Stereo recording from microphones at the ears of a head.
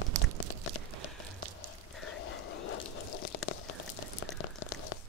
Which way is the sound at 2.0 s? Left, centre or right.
Left.